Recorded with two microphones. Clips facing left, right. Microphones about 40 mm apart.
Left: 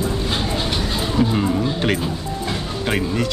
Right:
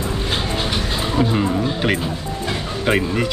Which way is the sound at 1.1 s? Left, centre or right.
Centre.